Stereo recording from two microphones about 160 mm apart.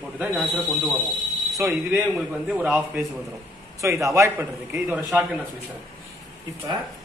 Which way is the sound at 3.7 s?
20° right (ahead or behind).